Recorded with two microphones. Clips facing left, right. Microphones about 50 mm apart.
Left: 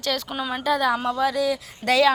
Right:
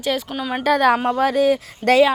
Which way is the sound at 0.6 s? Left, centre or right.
Right.